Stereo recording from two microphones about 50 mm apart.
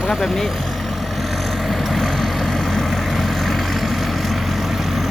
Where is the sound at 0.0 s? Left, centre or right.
Centre.